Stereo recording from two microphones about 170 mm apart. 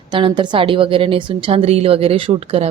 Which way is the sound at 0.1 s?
30° right (ahead or behind).